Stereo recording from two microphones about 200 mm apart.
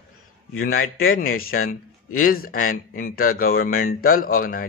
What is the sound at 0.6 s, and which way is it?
Speech, 45° left (ahead or behind).